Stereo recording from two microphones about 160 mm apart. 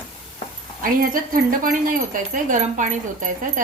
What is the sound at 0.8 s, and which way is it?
Speech, 60° right (ahead or behind).